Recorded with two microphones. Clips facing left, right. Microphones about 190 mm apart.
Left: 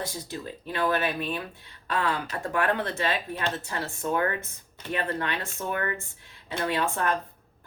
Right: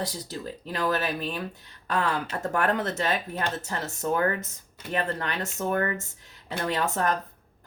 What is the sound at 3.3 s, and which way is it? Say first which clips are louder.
Speech: even; 40° right (ahead or behind).